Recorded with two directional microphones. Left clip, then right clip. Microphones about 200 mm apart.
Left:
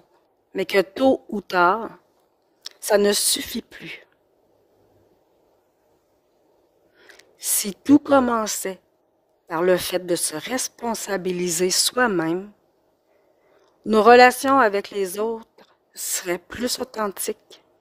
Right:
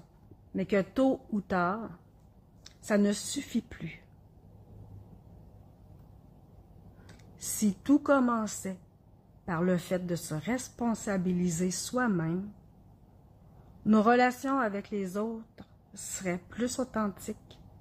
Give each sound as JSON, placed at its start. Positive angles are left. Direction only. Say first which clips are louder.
{"t": 0.5, "sound": "a woman's voice", "louder": "left 10 dB", "side_deg": 55}
{"t": 7.2, "sound": "a woman's voice", "louder": "left 8 dB", "side_deg": 45}
{"t": 13.8, "sound": "a woman's voice", "louder": "left 13 dB", "side_deg": 45}